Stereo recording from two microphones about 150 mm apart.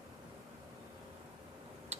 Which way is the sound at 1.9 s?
45° right (ahead or behind).